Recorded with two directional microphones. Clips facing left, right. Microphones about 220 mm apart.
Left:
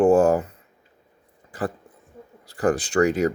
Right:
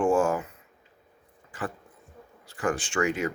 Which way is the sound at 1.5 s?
35° left (ahead or behind).